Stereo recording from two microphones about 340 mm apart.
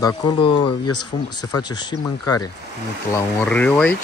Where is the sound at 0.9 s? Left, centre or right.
Left.